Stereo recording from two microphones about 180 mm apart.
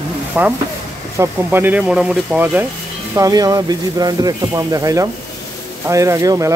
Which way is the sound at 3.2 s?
20° right (ahead or behind).